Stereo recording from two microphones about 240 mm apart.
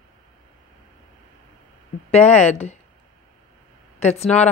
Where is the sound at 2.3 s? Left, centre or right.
Left.